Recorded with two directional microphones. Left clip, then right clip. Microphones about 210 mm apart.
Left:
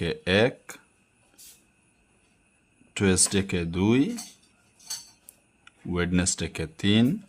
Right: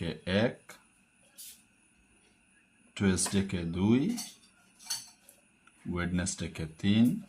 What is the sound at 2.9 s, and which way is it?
Speech, 50° left (ahead or behind).